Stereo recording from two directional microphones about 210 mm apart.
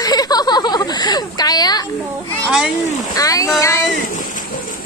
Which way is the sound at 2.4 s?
5° right (ahead or behind).